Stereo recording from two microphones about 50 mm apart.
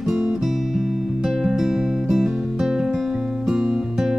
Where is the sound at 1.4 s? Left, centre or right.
Centre.